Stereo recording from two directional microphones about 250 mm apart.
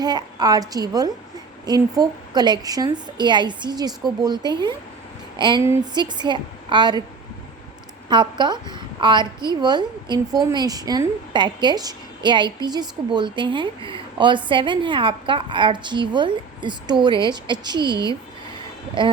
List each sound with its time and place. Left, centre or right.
0.0 s a woman's voice: centre
8.1 s a woman's voice: centre